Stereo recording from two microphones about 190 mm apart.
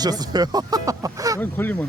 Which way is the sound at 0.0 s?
20° right (ahead or behind).